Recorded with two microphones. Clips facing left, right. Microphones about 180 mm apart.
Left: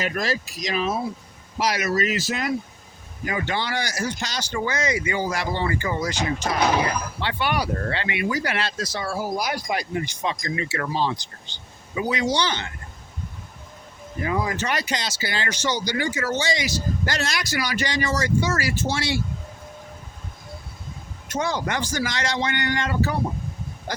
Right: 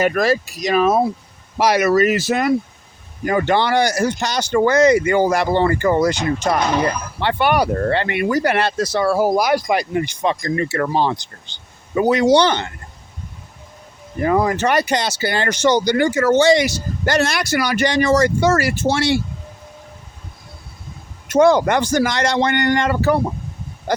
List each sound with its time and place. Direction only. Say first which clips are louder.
0.0 s speech: right 9 dB; 60° right (ahead or behind)
7.2 s speech: right 10 dB; 55° right (ahead or behind)
10.4 s speech: right 8 dB; 50° right (ahead or behind)
14.2 s speech: right 8 dB; 55° right (ahead or behind)
16.4 s speech: right 12 dB; 65° right (ahead or behind)
21.3 s speech: right 12 dB; 60° right (ahead or behind)